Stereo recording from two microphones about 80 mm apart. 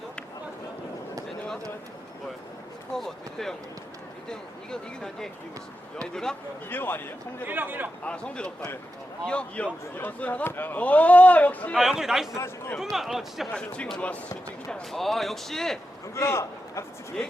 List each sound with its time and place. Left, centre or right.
2.9 s a sound: centre
4.3 s speech: centre
6.7 s a man's voice: left
7.4 s a man's voice: right
8.0 s a man's voice: centre
11.7 s speech: centre
12.4 s a man's voice: left
12.8 s speech: centre
13.5 s speech: centre
16.1 s a man's voice: left